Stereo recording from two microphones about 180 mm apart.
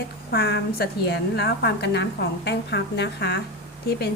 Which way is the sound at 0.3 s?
60° left (ahead or behind).